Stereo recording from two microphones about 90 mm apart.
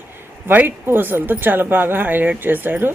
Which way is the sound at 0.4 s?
20° right (ahead or behind).